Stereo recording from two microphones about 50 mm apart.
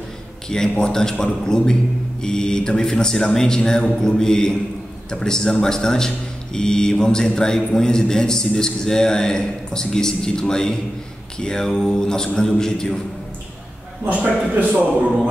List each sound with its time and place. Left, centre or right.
0.5 s speech: centre
14.0 s a man's voice: right